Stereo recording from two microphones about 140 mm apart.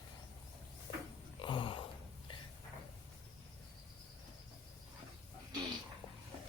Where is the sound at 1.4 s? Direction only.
35° left (ahead or behind).